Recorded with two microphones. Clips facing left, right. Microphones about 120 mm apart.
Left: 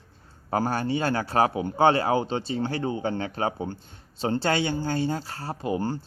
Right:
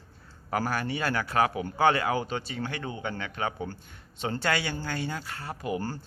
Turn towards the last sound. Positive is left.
turn(degrees=20)  # may be behind; listen again after turning